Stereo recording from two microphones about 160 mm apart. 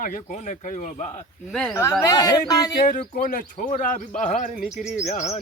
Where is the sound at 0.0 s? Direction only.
55° left (ahead or behind).